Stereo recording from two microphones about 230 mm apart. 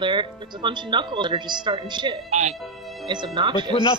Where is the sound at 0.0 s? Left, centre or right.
Right.